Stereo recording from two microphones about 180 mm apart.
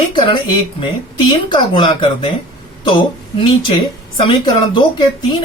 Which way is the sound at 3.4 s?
30° left (ahead or behind).